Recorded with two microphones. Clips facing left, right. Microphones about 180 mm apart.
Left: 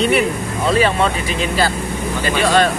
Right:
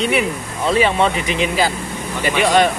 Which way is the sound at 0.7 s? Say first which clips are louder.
Even; 20° right (ahead or behind).